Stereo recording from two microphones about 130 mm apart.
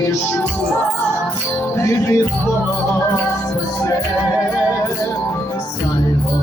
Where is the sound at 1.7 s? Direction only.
20° left (ahead or behind).